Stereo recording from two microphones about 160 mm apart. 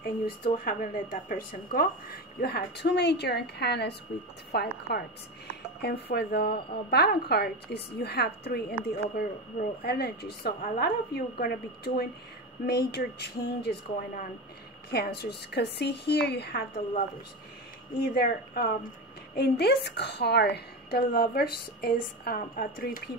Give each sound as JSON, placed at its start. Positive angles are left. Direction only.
{"t": 0.0, "sound": "speech", "side_deg": 60}
{"t": 9.1, "sound": "a woman's voice", "side_deg": 70}
{"t": 12.6, "sound": "speech", "side_deg": 90}
{"t": 18.0, "sound": "a woman's voice", "side_deg": 80}